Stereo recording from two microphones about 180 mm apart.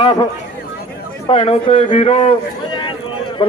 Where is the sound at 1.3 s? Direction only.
30° left (ahead or behind).